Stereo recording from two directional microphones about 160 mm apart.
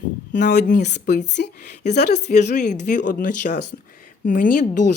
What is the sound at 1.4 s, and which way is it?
Speech, 75° left (ahead or behind).